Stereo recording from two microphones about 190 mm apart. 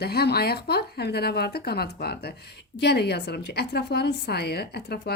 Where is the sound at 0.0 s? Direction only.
55° left (ahead or behind).